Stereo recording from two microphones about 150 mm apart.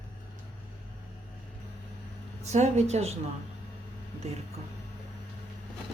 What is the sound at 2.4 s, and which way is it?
Speech, 50° right (ahead or behind).